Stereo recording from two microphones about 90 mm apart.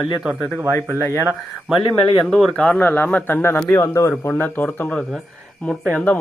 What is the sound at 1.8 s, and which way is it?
Speech, 70° left (ahead or behind).